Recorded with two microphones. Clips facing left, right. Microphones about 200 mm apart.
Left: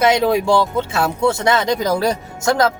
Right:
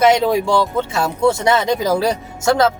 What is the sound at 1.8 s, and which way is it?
Speech, 5° right (ahead or behind).